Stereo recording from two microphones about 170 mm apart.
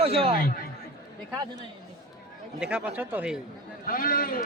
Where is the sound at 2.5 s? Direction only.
5° right (ahead or behind).